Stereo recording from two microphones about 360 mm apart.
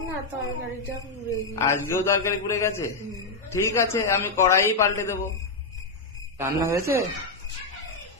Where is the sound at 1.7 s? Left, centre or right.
Centre.